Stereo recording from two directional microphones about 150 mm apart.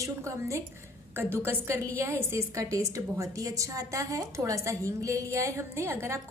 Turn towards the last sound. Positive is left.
turn(degrees=-15)  # may be behind; listen again after turning